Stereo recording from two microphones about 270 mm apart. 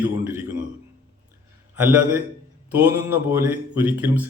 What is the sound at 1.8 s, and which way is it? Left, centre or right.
Speech, centre.